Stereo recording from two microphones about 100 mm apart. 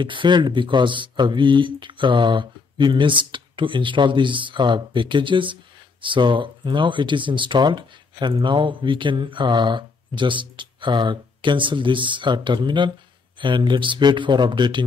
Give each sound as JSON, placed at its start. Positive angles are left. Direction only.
{"t": 0.0, "sound": "speech", "side_deg": -55}